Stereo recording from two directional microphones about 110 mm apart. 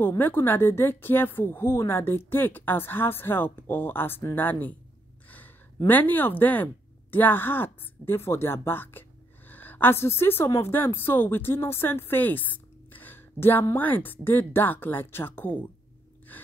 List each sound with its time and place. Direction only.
0.2 s a woman's voice: 20° left (ahead or behind)
5.9 s a woman's voice: 15° left (ahead or behind)